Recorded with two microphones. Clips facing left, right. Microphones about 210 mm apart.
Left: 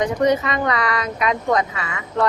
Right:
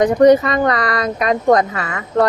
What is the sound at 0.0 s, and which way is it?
Speech, 40° right (ahead or behind).